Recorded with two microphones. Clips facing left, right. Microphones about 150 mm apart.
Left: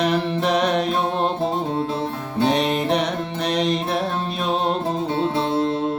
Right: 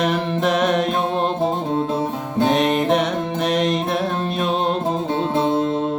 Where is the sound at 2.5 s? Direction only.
Centre (ahead or behind).